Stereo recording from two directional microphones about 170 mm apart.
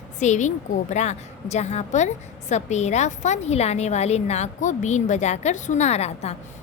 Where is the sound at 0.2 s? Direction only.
45° left (ahead or behind).